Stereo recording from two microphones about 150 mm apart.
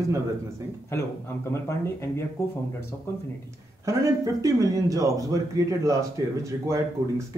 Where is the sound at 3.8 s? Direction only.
20° right (ahead or behind).